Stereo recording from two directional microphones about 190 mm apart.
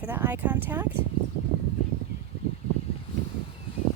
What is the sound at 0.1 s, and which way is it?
Speech, 10° right (ahead or behind).